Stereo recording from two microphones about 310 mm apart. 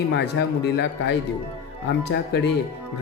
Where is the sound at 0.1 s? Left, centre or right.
Left.